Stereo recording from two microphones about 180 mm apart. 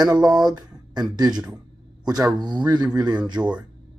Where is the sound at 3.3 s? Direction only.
5° right (ahead or behind).